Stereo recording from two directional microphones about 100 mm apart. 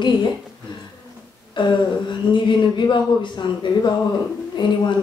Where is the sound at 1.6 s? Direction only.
50° left (ahead or behind).